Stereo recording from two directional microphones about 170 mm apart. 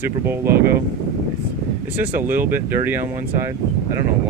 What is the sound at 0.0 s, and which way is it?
Speech, 15° right (ahead or behind).